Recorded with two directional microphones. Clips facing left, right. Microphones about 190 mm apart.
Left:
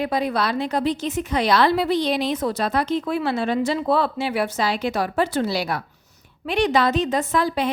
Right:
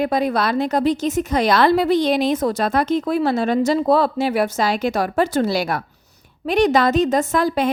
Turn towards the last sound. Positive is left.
turn(degrees=-45)  # may be behind; listen again after turning